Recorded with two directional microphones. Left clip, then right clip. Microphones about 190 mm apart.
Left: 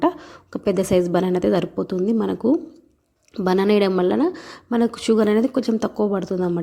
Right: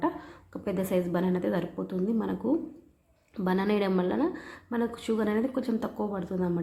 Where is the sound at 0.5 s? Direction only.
40° left (ahead or behind).